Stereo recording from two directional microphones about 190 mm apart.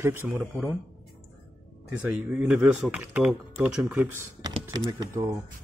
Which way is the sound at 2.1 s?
5° right (ahead or behind).